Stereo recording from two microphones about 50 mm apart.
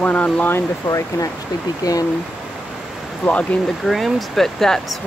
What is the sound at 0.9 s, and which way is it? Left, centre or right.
Speech, left.